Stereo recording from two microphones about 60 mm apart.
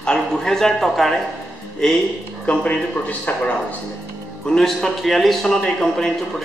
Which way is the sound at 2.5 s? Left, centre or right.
Centre.